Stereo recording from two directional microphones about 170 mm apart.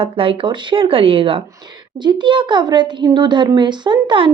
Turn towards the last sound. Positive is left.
turn(degrees=-30)  # may be behind; listen again after turning